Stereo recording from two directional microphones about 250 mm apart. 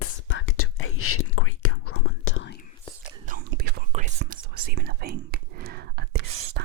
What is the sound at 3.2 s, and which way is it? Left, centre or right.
Whispering, right.